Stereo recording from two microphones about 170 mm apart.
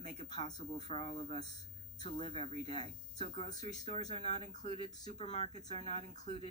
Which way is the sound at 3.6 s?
45° right (ahead or behind).